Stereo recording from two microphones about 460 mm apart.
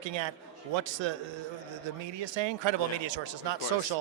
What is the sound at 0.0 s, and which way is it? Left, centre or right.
A man's voice, right.